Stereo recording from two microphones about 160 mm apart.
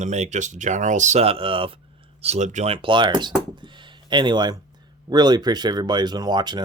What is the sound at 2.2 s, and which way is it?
Speech, 45° right (ahead or behind).